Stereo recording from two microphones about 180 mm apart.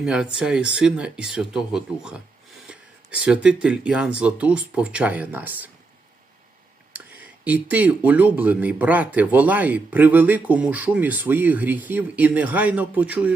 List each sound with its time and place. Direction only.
0.0 s speech: 5° right (ahead or behind)
6.9 s a sound: 10° right (ahead or behind)
7.4 s speech: 10° right (ahead or behind)